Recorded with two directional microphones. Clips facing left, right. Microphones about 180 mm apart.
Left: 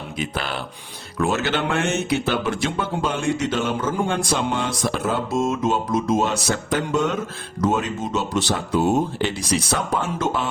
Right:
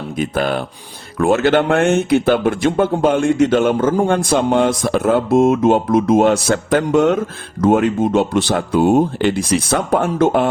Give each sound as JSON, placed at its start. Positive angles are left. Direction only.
{"t": 0.2, "sound": "speech", "side_deg": -50}